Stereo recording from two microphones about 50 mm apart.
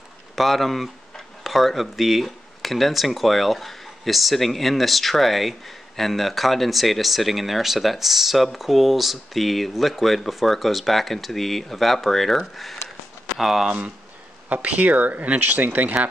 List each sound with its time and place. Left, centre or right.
0.4 s speech: centre
13.7 s speech: right